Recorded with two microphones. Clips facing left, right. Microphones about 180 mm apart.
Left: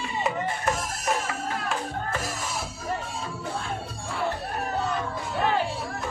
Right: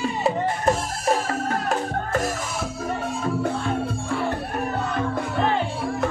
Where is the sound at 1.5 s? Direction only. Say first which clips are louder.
Right 6 dB; 45° right (ahead or behind).